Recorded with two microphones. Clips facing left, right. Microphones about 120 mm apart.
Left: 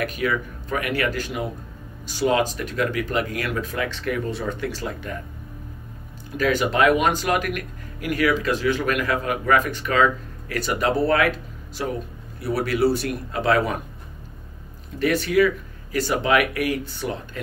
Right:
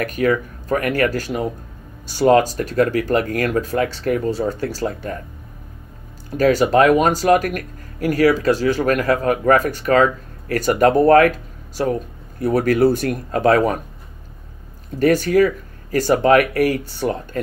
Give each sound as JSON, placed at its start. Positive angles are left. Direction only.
{"t": 0.0, "sound": "speech", "side_deg": -45}
{"t": 6.3, "sound": "speech", "side_deg": -40}
{"t": 15.0, "sound": "speech", "side_deg": -40}